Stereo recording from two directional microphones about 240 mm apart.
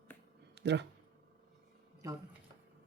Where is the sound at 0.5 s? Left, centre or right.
Right.